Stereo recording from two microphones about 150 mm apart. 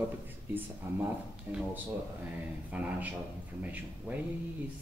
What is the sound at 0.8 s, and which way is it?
Speech, 15° right (ahead or behind).